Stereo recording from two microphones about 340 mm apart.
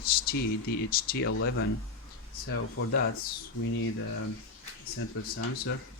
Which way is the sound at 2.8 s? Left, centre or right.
Left.